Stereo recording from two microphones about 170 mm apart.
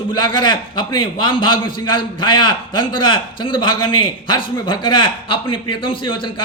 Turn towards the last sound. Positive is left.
turn(degrees=30)  # may be behind; listen again after turning